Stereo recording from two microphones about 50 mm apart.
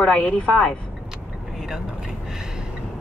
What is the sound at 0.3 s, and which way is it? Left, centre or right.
Speech, centre.